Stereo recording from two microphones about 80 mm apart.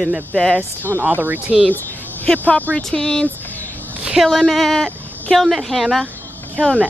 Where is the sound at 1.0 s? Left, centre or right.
Right.